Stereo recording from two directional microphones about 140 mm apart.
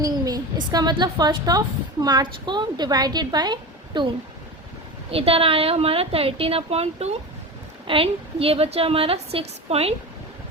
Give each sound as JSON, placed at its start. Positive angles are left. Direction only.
{"t": 0.0, "sound": "a woman's voice", "side_deg": -25}
{"t": 5.1, "sound": "a woman's voice", "side_deg": -45}